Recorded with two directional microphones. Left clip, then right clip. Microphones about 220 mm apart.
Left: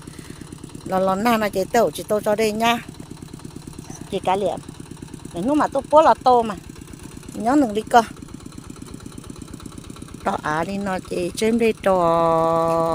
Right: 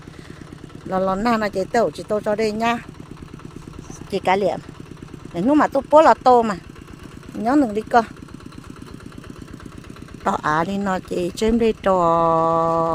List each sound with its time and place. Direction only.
0.9 s speech: 5° right (ahead or behind)
4.1 s speech: 15° right (ahead or behind)
7.4 s speech: 5° right (ahead or behind)
10.2 s speech: 15° right (ahead or behind)